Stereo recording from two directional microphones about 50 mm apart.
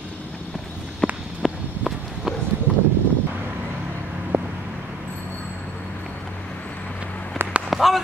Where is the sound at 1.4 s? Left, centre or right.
Centre.